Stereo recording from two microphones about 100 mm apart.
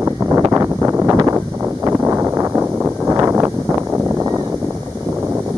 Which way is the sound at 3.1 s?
25° right (ahead or behind).